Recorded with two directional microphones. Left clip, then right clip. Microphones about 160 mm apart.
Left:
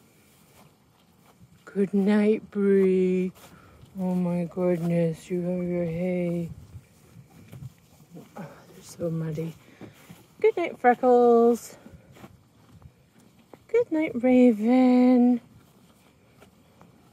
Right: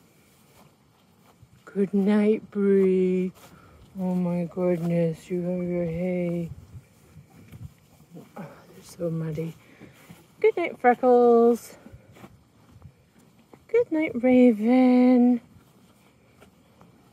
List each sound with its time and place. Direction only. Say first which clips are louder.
1.6 s speech: even; 5° right (ahead or behind)
3.3 s speech: even; 5° left (ahead or behind)
8.4 s speech: even; 10° right (ahead or behind)
13.7 s speech: right 1 dB; 10° right (ahead or behind)